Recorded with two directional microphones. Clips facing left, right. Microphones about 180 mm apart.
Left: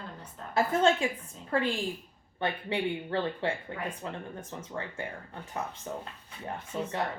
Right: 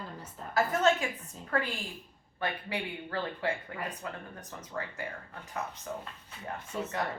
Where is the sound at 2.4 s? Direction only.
25° left (ahead or behind).